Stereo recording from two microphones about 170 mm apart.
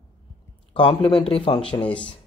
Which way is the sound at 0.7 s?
30° left (ahead or behind).